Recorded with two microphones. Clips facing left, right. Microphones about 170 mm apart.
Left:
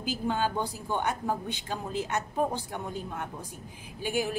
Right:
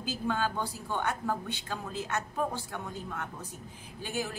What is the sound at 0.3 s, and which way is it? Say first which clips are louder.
A woman's voice: left 2 dB; 20° left (ahead or behind).